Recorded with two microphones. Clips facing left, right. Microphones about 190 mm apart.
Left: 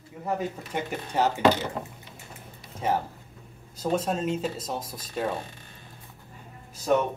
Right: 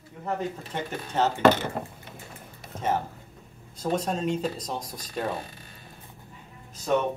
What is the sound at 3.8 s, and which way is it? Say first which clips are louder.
Speech: left 1 dB; 5° left (ahead or behind).